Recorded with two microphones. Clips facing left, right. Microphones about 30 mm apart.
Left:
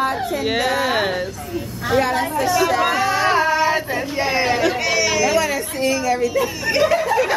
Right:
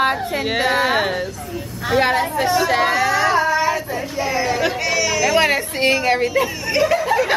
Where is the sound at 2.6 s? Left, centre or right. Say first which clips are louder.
Right 1 dB; right.